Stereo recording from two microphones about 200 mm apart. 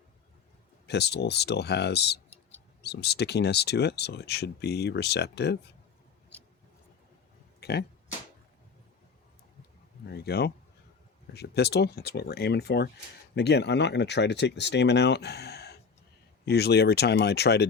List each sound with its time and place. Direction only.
0.9 s speech: 55° left (ahead or behind)
7.6 s speech: 55° left (ahead or behind)
10.1 s speech: 55° left (ahead or behind)